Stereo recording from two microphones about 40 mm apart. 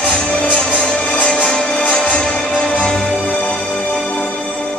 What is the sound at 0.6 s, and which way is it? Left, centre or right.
Music, centre.